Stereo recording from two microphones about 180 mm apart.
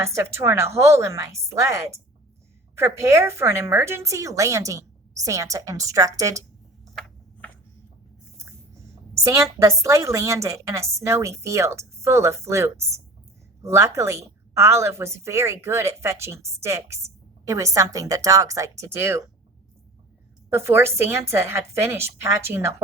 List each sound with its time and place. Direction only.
0.0 s a woman's voice: 15° right (ahead or behind)
9.2 s a woman's voice: 15° right (ahead or behind)
20.5 s a woman's voice: 15° right (ahead or behind)